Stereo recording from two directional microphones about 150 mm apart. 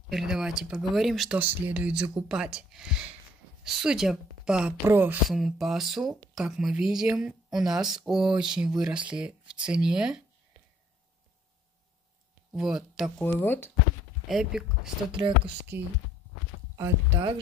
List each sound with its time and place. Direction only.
0.1 s a woman's voice: 5° right (ahead or behind)
1.4 s a woman's voice: 10° right (ahead or behind)
5.3 s a woman's voice: centre (ahead or behind)
12.5 s a woman's voice: 5° right (ahead or behind)
13.2 s speech: 15° left (ahead or behind)
14.2 s speech: 5° right (ahead or behind)
15.0 s speech: 35° right (ahead or behind)